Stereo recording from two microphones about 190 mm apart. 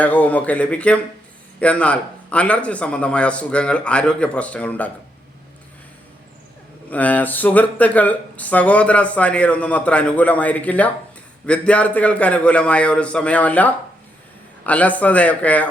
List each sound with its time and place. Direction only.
0.0 s speech: 10° left (ahead or behind)
6.9 s speech: 10° left (ahead or behind)